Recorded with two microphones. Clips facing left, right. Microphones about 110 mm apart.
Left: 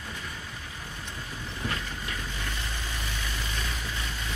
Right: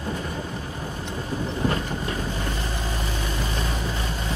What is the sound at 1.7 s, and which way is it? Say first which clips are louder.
Vehicle: right 8 dB; 35° right (ahead or behind).